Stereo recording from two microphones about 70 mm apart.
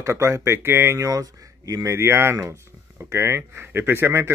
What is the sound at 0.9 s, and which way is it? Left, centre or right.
Speech, right.